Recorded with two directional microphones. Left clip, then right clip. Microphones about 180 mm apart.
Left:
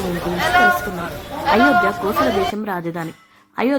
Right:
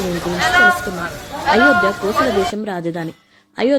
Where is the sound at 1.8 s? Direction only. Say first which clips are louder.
Right 1 dB; 15° right (ahead or behind).